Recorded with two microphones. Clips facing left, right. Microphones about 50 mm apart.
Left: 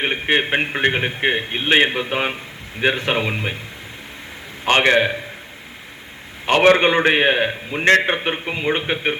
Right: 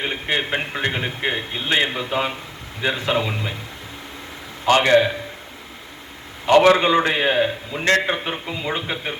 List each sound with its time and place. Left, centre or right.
0.0 s a man's voice: left
4.6 s a man's voice: left
6.4 s a man's voice: left